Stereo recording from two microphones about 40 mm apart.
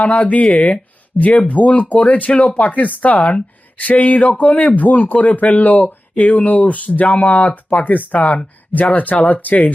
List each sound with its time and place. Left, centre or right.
0.0 s speech: left